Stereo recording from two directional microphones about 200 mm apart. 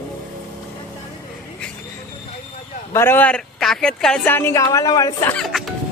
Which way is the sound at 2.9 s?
10° left (ahead or behind).